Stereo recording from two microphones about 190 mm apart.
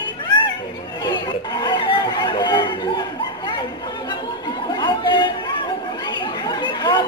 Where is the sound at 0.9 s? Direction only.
20° left (ahead or behind).